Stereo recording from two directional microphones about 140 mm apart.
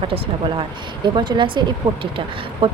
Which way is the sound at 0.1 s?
35° right (ahead or behind).